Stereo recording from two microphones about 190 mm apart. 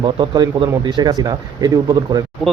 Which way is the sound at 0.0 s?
25° right (ahead or behind).